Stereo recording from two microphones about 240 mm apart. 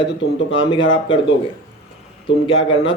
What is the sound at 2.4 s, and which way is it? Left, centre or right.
Speech, left.